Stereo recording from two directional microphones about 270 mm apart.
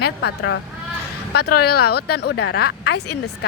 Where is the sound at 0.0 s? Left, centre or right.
Left.